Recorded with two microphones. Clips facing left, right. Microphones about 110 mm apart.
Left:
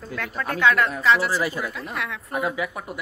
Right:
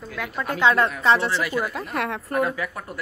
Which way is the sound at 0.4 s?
25° right (ahead or behind).